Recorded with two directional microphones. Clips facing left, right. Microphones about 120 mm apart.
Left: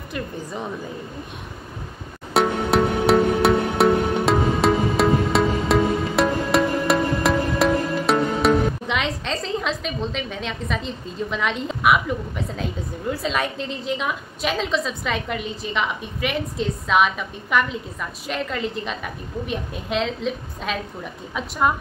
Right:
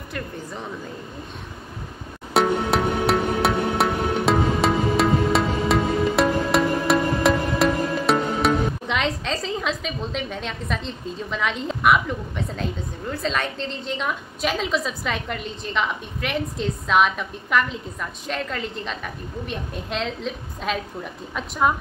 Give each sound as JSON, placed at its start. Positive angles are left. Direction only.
{"t": 2.3, "sound": "music", "side_deg": 0}
{"t": 13.1, "sound": "a woman's voice", "side_deg": 5}